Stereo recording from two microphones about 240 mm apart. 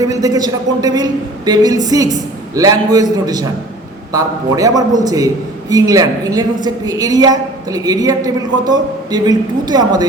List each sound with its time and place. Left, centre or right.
0.0 s a woman's voice: centre